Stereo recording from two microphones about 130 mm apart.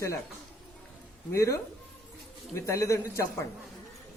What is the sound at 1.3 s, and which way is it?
Speech, 25° left (ahead or behind).